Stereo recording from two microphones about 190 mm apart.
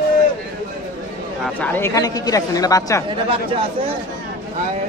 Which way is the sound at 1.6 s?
10° left (ahead or behind).